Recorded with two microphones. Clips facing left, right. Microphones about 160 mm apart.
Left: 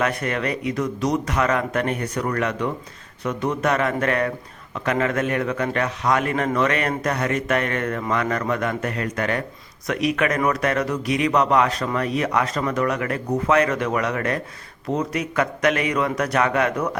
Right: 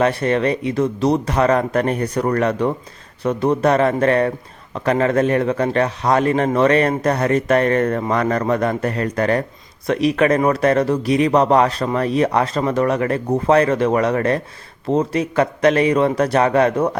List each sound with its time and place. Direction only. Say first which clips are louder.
0.0 s a man's voice: right 7 dB; 30° right (ahead or behind)